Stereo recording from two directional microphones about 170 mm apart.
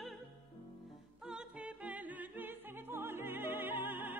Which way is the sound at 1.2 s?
5° right (ahead or behind).